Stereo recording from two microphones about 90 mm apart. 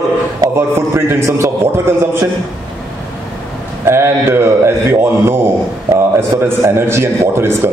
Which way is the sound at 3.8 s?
30° right (ahead or behind).